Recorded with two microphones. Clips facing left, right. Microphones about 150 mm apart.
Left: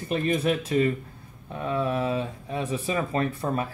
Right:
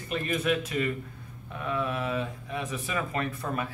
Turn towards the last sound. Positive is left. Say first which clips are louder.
# left 5 dB
turn(degrees=35)  # may be behind; listen again after turning